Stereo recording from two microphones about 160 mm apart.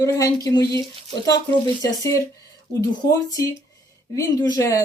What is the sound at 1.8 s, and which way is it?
Speech, 20° left (ahead or behind).